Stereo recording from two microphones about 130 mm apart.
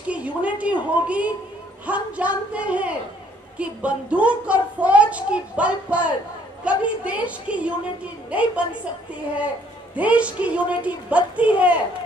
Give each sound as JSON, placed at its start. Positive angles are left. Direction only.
{"t": 0.1, "sound": "a woman's voice", "side_deg": -10}
{"t": 9.9, "sound": "a woman's voice", "side_deg": -10}